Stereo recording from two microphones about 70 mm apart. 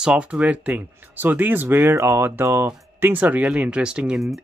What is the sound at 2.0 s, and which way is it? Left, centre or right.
Speech, right.